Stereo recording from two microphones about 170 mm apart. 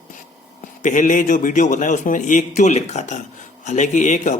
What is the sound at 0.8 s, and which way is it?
Speech, 50° left (ahead or behind).